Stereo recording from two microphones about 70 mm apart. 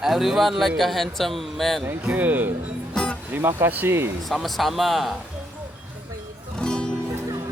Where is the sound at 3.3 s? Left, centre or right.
Right.